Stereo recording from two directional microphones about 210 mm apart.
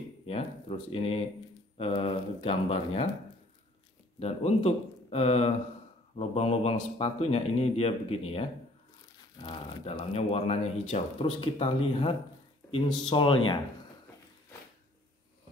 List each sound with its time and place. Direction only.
0.2 s speech: 30° left (ahead or behind)
4.2 s speech: 30° left (ahead or behind)